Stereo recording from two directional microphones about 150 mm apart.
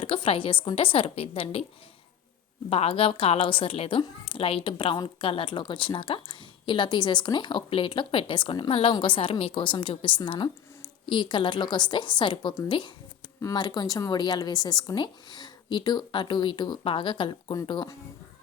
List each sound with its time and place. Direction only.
0.0 s a woman's voice: 35° left (ahead or behind)
2.6 s a woman's voice: 40° left (ahead or behind)